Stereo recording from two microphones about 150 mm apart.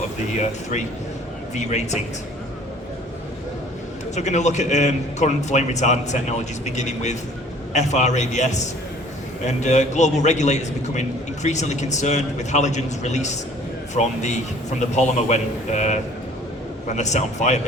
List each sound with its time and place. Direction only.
0.3 s a man's voice: 50° left (ahead or behind)
4.1 s a man's voice: 50° left (ahead or behind)